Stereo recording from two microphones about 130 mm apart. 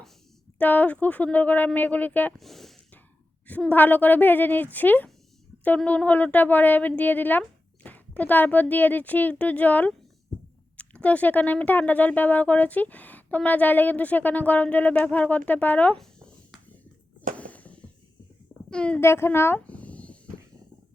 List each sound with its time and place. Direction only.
0.6 s speech: 10° left (ahead or behind)
2.4 s speech: centre (ahead or behind)
3.4 s speech: 10° left (ahead or behind)
17.3 s a sound: 10° left (ahead or behind)
18.7 s speech: 10° left (ahead or behind)
18.9 s speech: 20° left (ahead or behind)